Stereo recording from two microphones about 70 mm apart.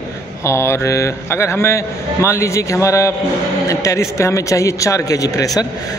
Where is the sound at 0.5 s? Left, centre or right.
Left.